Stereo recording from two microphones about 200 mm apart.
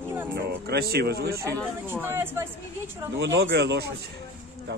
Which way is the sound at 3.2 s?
60° right (ahead or behind).